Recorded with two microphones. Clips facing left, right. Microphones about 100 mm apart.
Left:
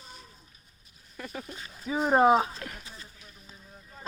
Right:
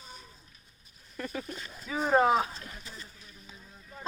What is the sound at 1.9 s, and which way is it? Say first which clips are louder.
Speech: left 3 dB; 25° left (ahead or behind).